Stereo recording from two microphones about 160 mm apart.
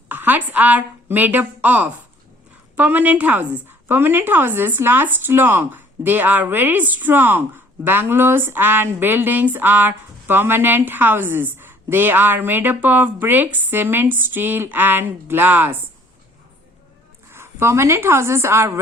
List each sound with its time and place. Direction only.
0.1 s a woman's voice: 10° right (ahead or behind)
17.3 s a woman's voice: 15° right (ahead or behind)